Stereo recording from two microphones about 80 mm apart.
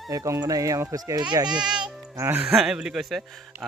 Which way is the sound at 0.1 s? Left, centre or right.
Right.